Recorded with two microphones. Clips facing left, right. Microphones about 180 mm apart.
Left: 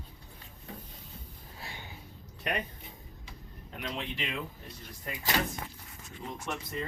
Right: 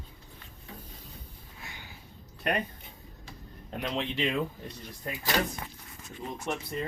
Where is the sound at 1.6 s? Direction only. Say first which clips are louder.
Left 2 dB; 25° left (ahead or behind).